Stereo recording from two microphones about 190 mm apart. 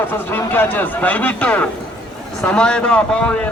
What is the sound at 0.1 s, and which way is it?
A man's voice, 10° left (ahead or behind).